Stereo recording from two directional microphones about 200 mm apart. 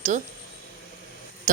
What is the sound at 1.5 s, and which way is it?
Speech, 40° right (ahead or behind).